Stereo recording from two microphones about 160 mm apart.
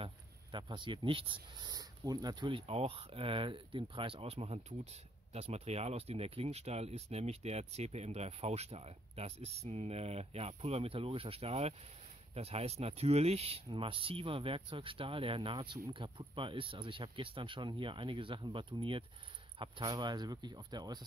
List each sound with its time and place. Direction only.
0.0 s speech: 30° right (ahead or behind)